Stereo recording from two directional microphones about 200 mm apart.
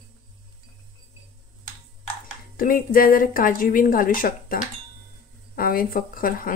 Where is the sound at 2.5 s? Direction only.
45° left (ahead or behind).